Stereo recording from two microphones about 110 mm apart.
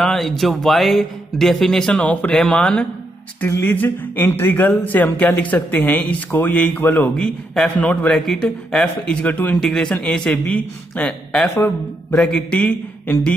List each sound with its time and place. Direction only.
0.0 s speech: centre (ahead or behind)
9.6 s speech: 5° left (ahead or behind); by 11.7 s 20° left (ahead or behind)
12.2 s speech: 10° left (ahead or behind)